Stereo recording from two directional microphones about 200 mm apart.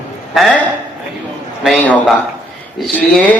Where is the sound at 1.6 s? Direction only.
5° left (ahead or behind).